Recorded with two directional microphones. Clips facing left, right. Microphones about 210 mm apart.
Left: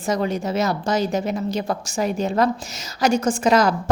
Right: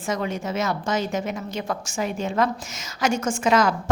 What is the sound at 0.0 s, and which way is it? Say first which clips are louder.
A woman's voice: left 4 dB; 35° left (ahead or behind).